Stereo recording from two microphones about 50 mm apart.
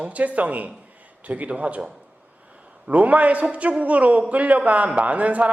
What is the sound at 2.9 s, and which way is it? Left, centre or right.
A man's voice, right.